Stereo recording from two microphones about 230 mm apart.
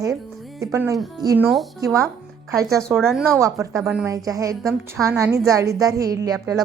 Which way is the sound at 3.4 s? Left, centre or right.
Centre.